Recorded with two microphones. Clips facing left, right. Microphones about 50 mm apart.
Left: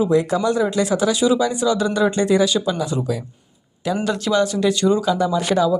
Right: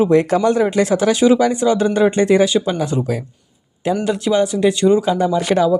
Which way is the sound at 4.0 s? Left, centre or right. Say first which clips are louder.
Right 2 dB; centre.